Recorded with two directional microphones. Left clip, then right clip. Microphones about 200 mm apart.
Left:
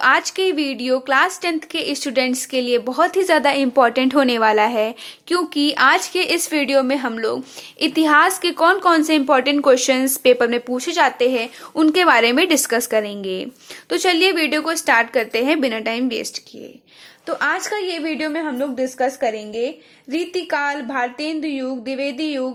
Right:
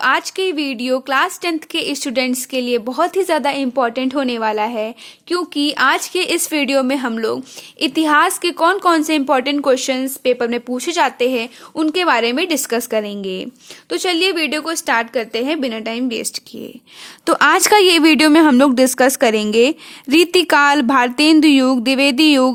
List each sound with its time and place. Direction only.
0.0 s speech: 25° right (ahead or behind)
17.2 s a woman's voice: 45° right (ahead or behind)